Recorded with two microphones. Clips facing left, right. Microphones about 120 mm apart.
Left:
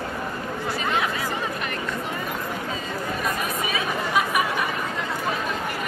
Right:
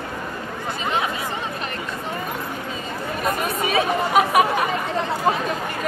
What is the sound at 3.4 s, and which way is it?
Chatter, 65° right (ahead or behind).